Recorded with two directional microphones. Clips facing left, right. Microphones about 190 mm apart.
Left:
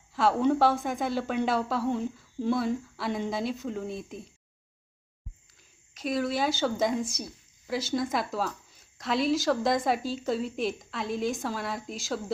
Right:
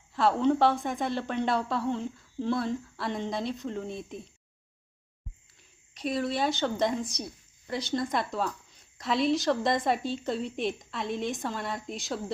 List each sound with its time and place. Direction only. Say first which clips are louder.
0.1 s a woman's voice: even; centre (ahead or behind)
5.9 s a woman's voice: left 1 dB; centre (ahead or behind)